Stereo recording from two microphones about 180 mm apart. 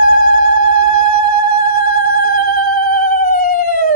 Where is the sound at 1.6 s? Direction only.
55° left (ahead or behind).